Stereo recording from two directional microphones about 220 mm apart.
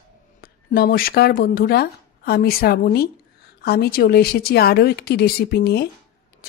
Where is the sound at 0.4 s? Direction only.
40° left (ahead or behind).